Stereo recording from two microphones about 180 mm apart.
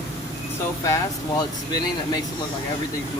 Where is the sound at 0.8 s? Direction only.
20° left (ahead or behind).